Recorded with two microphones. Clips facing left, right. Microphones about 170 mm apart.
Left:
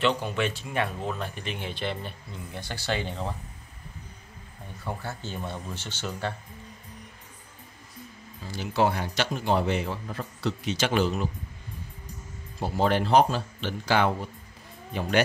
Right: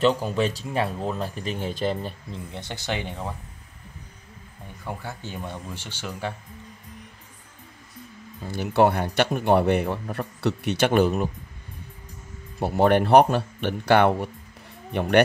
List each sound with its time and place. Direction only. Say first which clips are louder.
0.2 s speech: right 4 dB; 35° right (ahead or behind)
2.5 s speech: even; 20° right (ahead or behind)
4.8 s speech: even; 15° right (ahead or behind)
8.5 s a man's voice: right 5 dB; 60° right (ahead or behind)
12.5 s a man's voice: right 5 dB; 60° right (ahead or behind)